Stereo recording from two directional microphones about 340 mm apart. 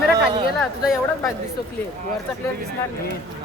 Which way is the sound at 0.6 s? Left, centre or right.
Centre.